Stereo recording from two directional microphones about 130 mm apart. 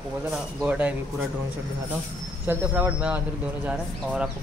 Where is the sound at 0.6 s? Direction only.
10° right (ahead or behind).